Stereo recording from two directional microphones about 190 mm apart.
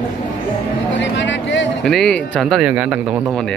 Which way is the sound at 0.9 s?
70° left (ahead or behind).